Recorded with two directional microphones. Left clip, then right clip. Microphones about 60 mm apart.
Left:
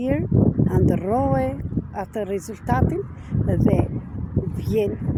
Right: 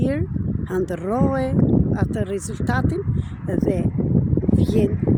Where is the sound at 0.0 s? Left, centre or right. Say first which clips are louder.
Left 3 dB; right.